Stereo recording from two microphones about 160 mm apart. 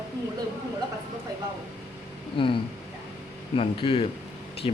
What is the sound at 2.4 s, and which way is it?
Speech, 35° left (ahead or behind).